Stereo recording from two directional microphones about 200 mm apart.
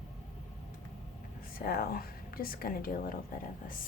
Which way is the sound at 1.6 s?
50° left (ahead or behind).